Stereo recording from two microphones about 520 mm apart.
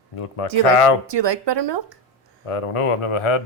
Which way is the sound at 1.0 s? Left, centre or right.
Right.